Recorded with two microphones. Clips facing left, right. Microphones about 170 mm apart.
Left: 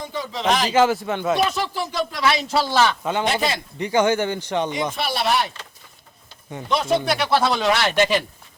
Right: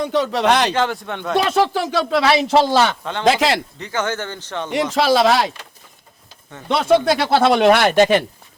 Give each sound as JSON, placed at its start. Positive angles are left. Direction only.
{"t": 0.0, "sound": "speech", "side_deg": -75}
{"t": 0.7, "sound": "speech", "side_deg": 5}
{"t": 1.4, "sound": "speech", "side_deg": -85}
{"t": 3.0, "sound": "speech", "side_deg": 10}
{"t": 3.2, "sound": "speech", "side_deg": -85}
{"t": 3.8, "sound": "speech", "side_deg": 15}
{"t": 4.7, "sound": "speech", "side_deg": -80}
{"t": 6.7, "sound": "speech", "side_deg": -60}